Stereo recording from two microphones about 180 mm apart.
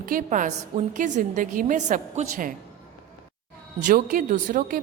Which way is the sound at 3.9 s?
50° right (ahead or behind).